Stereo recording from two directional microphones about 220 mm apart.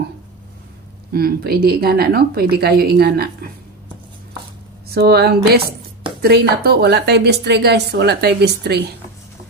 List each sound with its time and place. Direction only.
1.1 s a woman's voice: 45° right (ahead or behind)
4.8 s a woman's voice: 45° right (ahead or behind)